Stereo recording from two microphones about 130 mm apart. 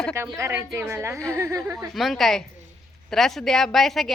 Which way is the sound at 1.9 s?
Centre (ahead or behind).